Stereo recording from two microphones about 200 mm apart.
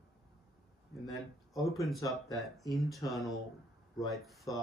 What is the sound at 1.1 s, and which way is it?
Speech, centre (ahead or behind).